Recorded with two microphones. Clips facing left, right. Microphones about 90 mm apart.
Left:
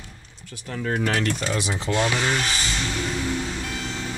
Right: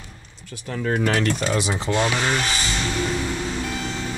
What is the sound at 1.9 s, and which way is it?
Speech, 20° right (ahead or behind).